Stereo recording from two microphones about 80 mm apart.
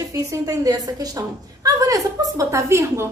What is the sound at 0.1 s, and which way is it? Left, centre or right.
A woman's voice, right.